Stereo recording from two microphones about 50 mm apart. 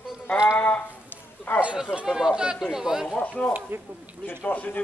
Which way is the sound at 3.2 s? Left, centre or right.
Left.